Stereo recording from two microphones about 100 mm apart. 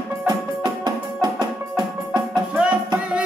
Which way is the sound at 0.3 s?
40° right (ahead or behind).